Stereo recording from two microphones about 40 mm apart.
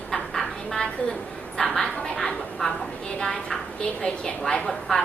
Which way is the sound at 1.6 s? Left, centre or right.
Centre.